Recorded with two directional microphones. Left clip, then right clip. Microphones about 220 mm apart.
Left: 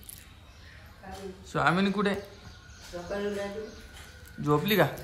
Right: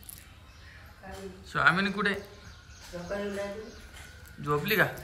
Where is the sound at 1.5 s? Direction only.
10° left (ahead or behind).